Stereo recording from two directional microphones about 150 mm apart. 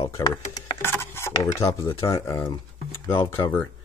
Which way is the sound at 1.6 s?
20° left (ahead or behind).